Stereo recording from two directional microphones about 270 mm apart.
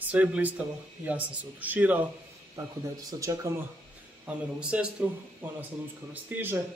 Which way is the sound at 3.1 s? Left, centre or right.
Centre.